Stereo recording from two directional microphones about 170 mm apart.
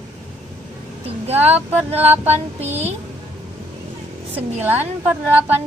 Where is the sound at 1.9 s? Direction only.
40° right (ahead or behind).